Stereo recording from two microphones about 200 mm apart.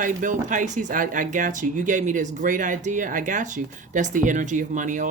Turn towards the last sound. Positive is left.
turn(degrees=-40)  # may be behind; listen again after turning